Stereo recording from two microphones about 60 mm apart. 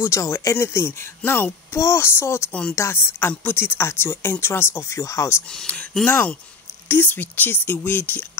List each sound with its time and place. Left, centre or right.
0.0 s speech: left
1.7 s speech: left
5.7 s speech: left
6.9 s speech: left